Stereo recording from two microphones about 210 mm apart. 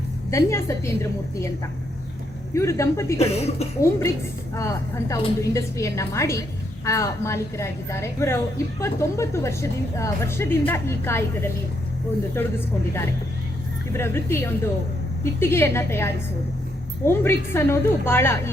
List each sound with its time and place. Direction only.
0.3 s a woman's voice: 15° left (ahead or behind)
2.5 s a woman's voice: 15° left (ahead or behind)
3.2 s speech: 30° left (ahead or behind)
4.5 s a woman's voice: 15° left (ahead or behind)